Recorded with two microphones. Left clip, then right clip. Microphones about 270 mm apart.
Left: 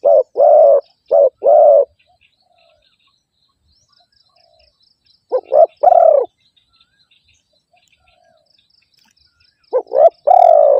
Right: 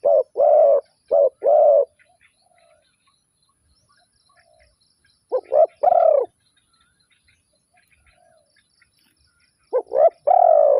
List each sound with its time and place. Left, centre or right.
0.0 s bird: left
5.3 s bird: left
9.6 s bird: left